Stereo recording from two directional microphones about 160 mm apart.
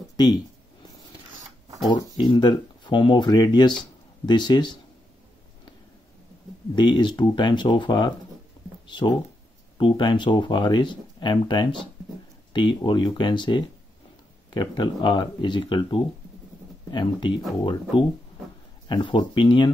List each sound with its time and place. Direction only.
2.1 s speech: 25° left (ahead or behind)
6.7 s speech: 30° left (ahead or behind)